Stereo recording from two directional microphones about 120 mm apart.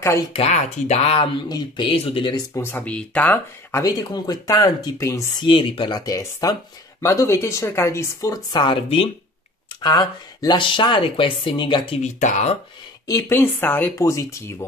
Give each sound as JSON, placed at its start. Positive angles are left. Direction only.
{"t": 0.4, "sound": "speech", "side_deg": 70}
{"t": 2.3, "sound": "speech", "side_deg": 25}
{"t": 2.7, "sound": "speech", "side_deg": 10}
{"t": 3.8, "sound": "speech", "side_deg": 35}
{"t": 5.4, "sound": "speech", "side_deg": 45}
{"t": 8.5, "sound": "speech", "side_deg": 45}
{"t": 9.8, "sound": "speech", "side_deg": 35}
{"t": 12.0, "sound": "speech", "side_deg": 90}
{"t": 13.0, "sound": "speech", "side_deg": 25}